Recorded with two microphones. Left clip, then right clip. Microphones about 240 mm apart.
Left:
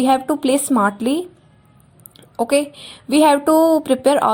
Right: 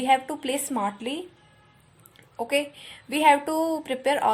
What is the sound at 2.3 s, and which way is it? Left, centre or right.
A woman's voice, left.